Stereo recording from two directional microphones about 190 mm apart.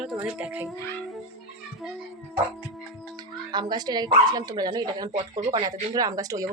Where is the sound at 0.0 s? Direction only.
5° right (ahead or behind).